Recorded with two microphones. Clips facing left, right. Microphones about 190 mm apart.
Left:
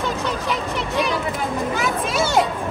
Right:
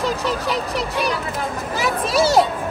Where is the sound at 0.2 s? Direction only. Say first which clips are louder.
Right 2 dB; centre (ahead or behind).